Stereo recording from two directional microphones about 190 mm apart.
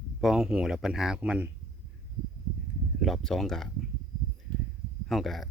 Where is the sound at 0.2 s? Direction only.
Centre (ahead or behind).